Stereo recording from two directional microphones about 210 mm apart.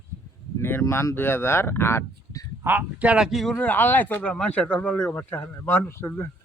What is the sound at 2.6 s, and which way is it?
Speech, 5° right (ahead or behind).